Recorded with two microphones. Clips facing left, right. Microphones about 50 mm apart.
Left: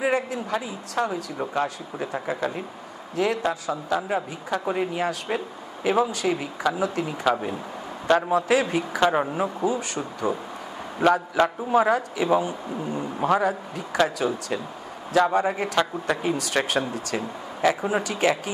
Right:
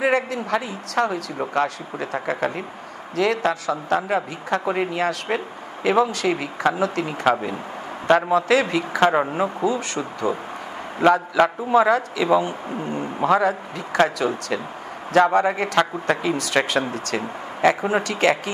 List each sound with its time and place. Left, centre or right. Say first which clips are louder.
0.0 s speech: right 3 dB; right
8.3 s speech: right 3 dB; right
16.8 s speech: right 3 dB; right